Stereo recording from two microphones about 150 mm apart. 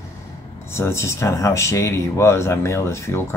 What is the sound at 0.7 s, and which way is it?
Speech, 20° left (ahead or behind).